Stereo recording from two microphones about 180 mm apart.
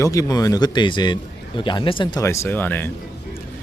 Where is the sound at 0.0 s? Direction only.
20° left (ahead or behind).